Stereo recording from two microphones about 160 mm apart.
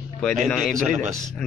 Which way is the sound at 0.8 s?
50° right (ahead or behind).